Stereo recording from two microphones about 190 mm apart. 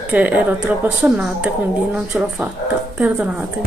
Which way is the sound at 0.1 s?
5° right (ahead or behind).